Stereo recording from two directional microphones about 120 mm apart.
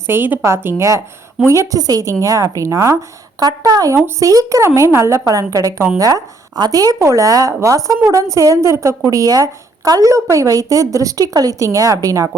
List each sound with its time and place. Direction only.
0.1 s a woman's voice: 20° right (ahead or behind)